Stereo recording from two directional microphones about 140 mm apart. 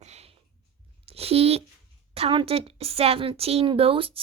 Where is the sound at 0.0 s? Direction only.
50° right (ahead or behind).